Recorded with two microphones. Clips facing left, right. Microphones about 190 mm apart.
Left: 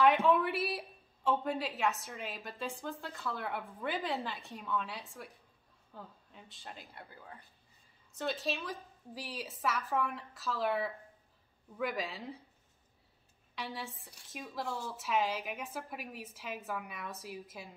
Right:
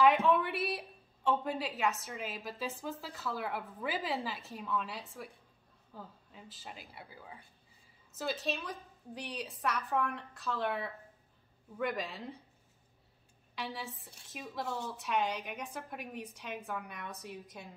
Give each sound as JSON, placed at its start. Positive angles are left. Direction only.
{"t": 0.0, "sound": "a woman's voice", "side_deg": 0}
{"t": 13.6, "sound": "a woman's voice", "side_deg": 0}